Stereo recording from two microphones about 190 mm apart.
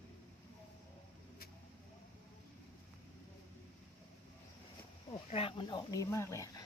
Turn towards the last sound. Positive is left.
turn(degrees=15)  # may be behind; listen again after turning